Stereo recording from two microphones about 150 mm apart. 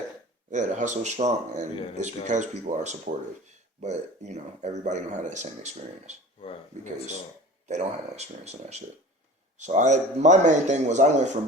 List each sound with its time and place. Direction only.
0.5 s a man's voice: 55° right (ahead or behind)
7.7 s a man's voice: 50° right (ahead or behind)